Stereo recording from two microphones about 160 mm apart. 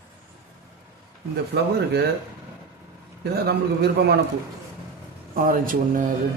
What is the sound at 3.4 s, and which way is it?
Speech, 85° right.